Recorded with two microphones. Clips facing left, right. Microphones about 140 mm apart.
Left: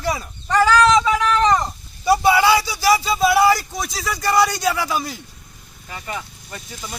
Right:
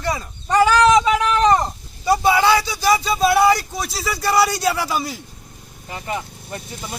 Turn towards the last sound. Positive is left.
turn(degrees=-25)  # may be behind; listen again after turning